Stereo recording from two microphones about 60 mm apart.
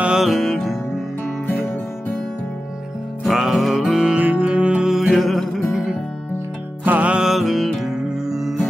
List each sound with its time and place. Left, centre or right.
0.2 s music: centre
3.3 s music: centre
4.2 s music: right
4.8 s music: centre
6.8 s music: right
7.2 s music: centre